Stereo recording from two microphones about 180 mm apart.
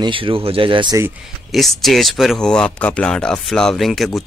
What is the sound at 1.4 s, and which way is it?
Speech, centre (ahead or behind).